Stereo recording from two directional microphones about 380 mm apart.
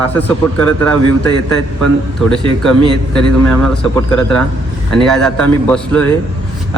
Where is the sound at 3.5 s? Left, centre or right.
Centre.